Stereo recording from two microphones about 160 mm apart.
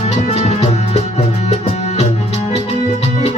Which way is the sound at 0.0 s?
40° left (ahead or behind).